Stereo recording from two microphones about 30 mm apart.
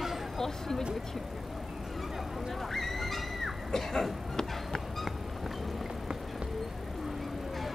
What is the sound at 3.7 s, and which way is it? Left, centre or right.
Vehicle, centre.